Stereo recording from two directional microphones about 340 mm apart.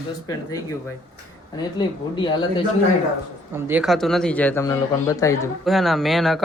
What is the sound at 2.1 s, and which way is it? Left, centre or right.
Speech, centre.